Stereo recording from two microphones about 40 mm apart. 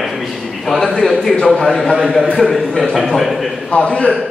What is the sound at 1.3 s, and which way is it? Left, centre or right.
A man's voice, centre.